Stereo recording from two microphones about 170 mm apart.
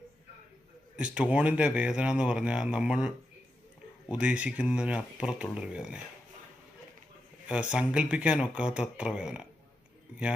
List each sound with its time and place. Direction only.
0.9 s speech: 5° right (ahead or behind)
4.1 s speech: 5° right (ahead or behind)
7.4 s speech: 5° right (ahead or behind)